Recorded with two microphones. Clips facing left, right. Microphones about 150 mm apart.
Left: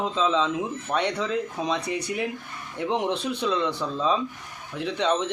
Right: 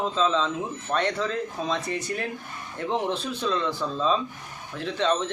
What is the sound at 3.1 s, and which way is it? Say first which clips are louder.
Speech: left 2 dB; 65° left (ahead or behind).